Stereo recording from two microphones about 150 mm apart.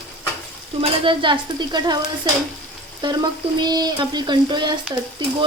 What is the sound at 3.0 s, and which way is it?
Frying, 30° right (ahead or behind).